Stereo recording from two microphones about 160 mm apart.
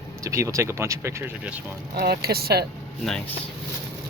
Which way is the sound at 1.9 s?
75° right (ahead or behind).